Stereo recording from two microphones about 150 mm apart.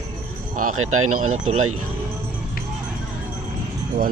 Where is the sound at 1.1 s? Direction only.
50° right (ahead or behind).